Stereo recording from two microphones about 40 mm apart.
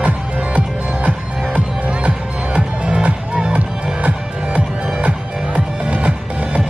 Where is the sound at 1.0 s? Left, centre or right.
Right.